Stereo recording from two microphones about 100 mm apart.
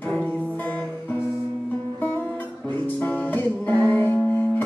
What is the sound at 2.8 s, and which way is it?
Music, 15° left (ahead or behind).